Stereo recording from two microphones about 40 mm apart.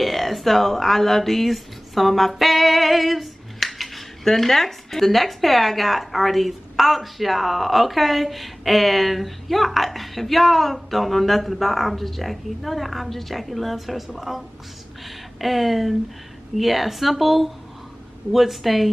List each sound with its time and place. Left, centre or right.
0.0 s speech: centre